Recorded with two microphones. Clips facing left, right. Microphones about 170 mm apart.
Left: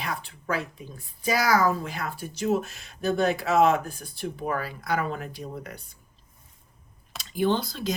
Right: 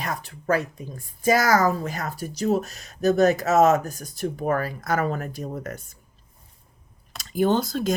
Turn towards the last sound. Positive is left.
turn(degrees=-45)  # may be behind; listen again after turning